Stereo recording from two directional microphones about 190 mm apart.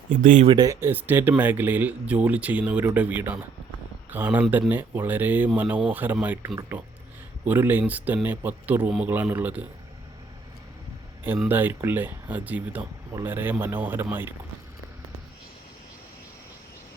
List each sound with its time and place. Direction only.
0.1 s speech: 45° right (ahead or behind)
0.4 s speech: 20° right (ahead or behind)
11.2 s speech: 10° right (ahead or behind)